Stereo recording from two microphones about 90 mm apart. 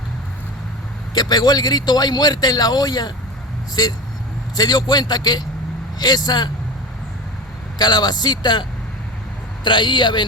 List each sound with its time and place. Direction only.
1.1 s a man's voice: 50° left (ahead or behind)
7.8 s a man's voice: 50° left (ahead or behind)
9.6 s a man's voice: 60° left (ahead or behind)